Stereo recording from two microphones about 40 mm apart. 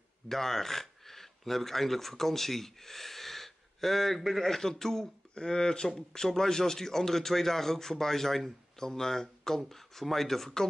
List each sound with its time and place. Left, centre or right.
0.3 s a man's voice: centre